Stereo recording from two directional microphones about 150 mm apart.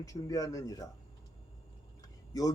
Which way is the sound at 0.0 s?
25° left (ahead or behind).